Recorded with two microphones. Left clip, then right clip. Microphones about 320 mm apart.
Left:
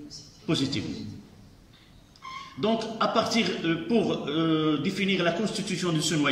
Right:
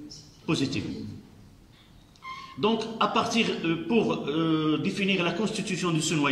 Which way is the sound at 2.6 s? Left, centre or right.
Centre.